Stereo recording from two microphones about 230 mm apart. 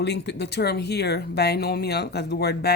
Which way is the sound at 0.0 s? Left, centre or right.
Left.